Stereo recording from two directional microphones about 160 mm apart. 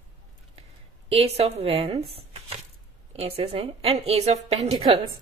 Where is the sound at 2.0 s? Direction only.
40° right (ahead or behind).